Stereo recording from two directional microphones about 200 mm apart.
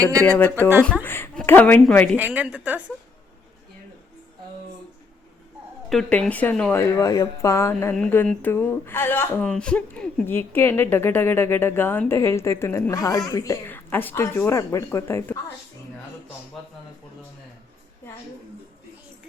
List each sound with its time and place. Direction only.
0.0 s a woman's voice: 15° right (ahead or behind)
0.3 s a woman's voice: 10° left (ahead or behind)
2.1 s a woman's voice: 10° right (ahead or behind)
5.9 s speech: 5° left (ahead or behind)
16.6 s a man's voice: centre (ahead or behind)